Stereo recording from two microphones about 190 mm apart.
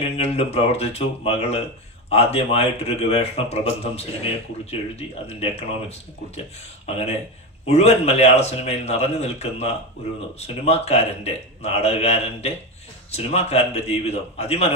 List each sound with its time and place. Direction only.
0.0 s a man's voice: 35° left (ahead or behind)
4.7 s a man's voice: 35° left (ahead or behind)
6.8 s a man's voice: 35° left (ahead or behind)